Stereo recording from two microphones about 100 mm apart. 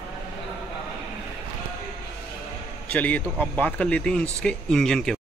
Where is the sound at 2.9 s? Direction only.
15° left (ahead or behind).